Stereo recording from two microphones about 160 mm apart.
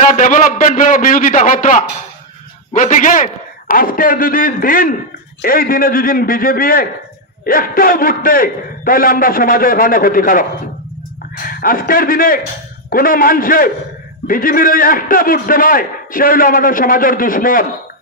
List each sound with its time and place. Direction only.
0.0 s a man's voice: 50° left (ahead or behind)
11.4 s a man's voice: 60° left (ahead or behind)